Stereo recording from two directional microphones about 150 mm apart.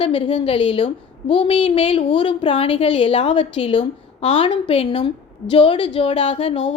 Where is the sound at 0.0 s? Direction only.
40° left (ahead or behind).